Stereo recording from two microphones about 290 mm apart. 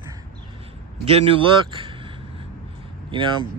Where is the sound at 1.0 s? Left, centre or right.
Centre.